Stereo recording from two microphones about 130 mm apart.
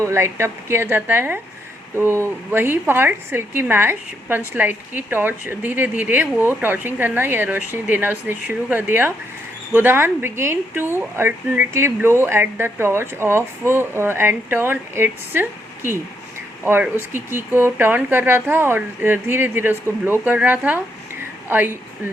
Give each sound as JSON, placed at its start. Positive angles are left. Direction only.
{"t": 0.0, "sound": "a woman's voice", "side_deg": -20}